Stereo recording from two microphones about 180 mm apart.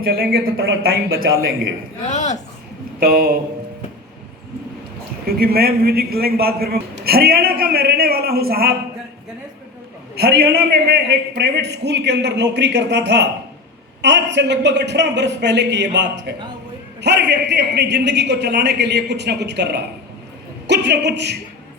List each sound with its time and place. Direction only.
0.0 s a man's voice: 55° right (ahead or behind); by 1.3 s 75° right (ahead or behind)
2.0 s speech: 40° left (ahead or behind)
3.0 s a man's voice: 55° right (ahead or behind)
5.2 s a man's voice: 55° right (ahead or behind)
10.2 s a man's voice: 65° right (ahead or behind)